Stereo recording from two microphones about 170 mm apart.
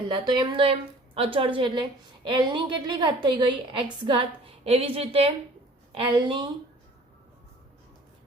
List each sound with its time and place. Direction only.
0.1 s a woman's voice: 25° right (ahead or behind)